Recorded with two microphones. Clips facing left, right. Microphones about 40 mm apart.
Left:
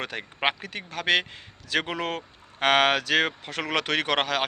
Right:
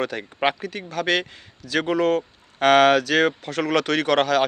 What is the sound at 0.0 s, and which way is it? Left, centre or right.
Speech, left.